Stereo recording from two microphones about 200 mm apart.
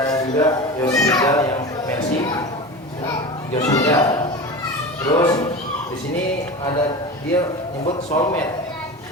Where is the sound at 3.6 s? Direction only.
15° left (ahead or behind).